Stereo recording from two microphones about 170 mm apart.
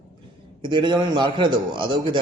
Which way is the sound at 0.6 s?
30° right (ahead or behind).